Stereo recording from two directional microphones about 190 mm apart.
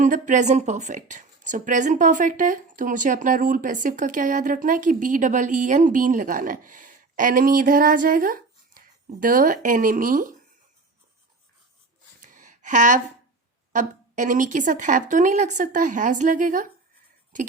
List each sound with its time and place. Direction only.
0.0 s speech: 40° right (ahead or behind)
12.2 s a sound: 40° right (ahead or behind)
13.7 s speech: 40° right (ahead or behind)